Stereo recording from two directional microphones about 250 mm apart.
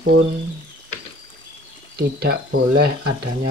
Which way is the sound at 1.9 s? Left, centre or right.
Right.